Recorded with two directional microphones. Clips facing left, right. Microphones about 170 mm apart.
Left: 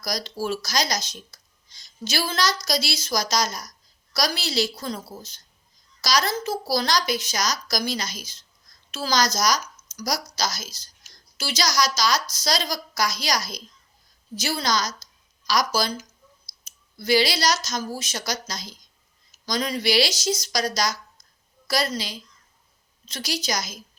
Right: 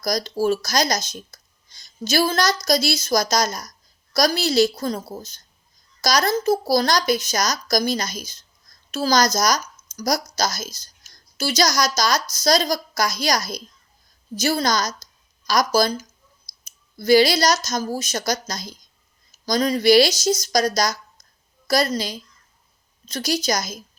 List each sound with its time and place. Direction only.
0.0 s speech: 45° right (ahead or behind)
16.7 s clicking: 45° right (ahead or behind)
17.0 s speech: 45° right (ahead or behind)